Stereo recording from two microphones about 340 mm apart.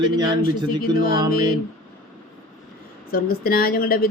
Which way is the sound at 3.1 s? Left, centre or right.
Left.